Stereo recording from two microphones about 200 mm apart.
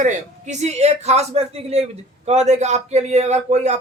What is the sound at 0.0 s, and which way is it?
A man's voice, 35° right (ahead or behind).